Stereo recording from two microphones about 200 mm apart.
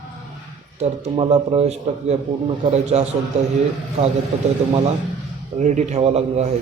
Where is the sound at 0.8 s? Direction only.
30° right (ahead or behind).